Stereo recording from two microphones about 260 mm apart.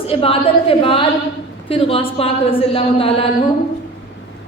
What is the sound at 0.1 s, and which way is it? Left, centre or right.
A woman's voice, left.